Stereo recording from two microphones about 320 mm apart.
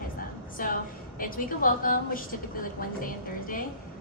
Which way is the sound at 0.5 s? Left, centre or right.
Left.